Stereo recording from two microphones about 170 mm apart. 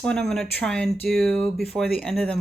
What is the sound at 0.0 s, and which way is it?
Speech, 5° left (ahead or behind).